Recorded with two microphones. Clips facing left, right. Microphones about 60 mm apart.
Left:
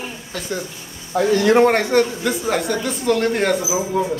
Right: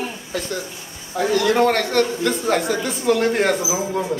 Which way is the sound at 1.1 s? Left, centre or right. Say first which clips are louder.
Left 3 dB; left.